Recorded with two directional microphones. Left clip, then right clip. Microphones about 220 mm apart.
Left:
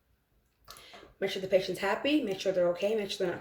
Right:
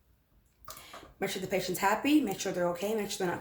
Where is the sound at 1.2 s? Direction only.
20° right (ahead or behind).